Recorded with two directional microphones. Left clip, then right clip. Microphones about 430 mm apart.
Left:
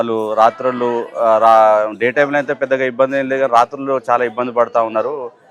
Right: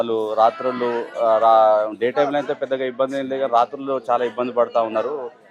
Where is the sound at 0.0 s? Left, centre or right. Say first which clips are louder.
Left 4 dB; left.